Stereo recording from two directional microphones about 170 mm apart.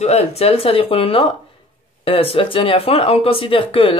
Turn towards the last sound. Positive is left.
turn(degrees=35)  # may be behind; listen again after turning